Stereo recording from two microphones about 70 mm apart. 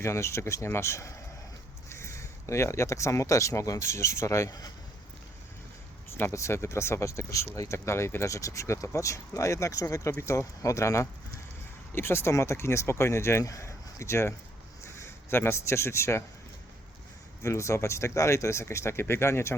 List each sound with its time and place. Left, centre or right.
0.0 s speech: left
6.3 s speech: left
11.9 s speech: left
13.4 s speech: left
17.4 s speech: left